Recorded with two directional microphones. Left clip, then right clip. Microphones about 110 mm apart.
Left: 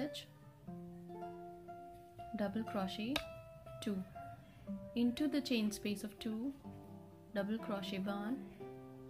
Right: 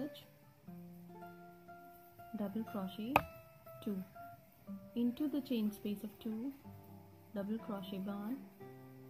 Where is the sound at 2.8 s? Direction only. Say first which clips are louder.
Left 4 dB; 20° right (ahead or behind).